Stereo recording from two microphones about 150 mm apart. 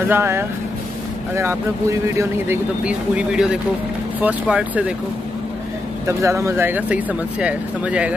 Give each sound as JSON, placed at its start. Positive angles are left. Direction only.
{"t": 0.1, "sound": "speech", "side_deg": -15}
{"t": 6.0, "sound": "speech", "side_deg": -20}